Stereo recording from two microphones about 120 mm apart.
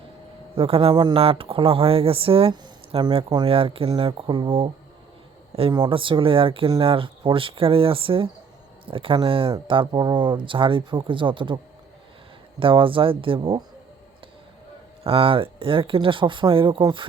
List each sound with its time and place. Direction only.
0.5 s speech: 50° right (ahead or behind)
5.7 s speech: 40° right (ahead or behind)
15.0 s speech: 50° right (ahead or behind)